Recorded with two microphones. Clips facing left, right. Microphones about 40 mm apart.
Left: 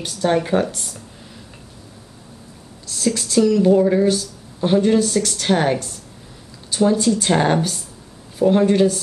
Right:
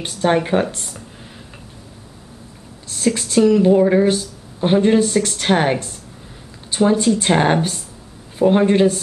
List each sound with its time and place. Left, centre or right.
0.0 s speech: right
2.9 s speech: right